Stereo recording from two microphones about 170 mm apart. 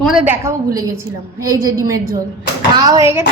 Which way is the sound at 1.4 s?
20° right (ahead or behind).